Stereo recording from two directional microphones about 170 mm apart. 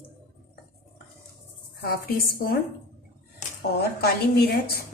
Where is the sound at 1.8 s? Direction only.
60° left (ahead or behind).